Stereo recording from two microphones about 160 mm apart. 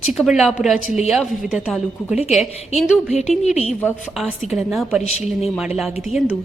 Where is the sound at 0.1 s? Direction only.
Centre (ahead or behind).